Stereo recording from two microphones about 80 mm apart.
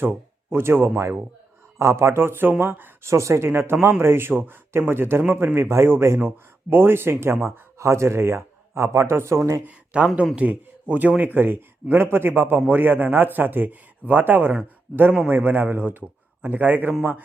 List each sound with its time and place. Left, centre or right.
0.5 s a man's voice: right
9.6 s a man's voice: centre